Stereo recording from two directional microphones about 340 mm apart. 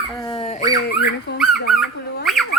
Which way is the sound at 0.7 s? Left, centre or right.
Left.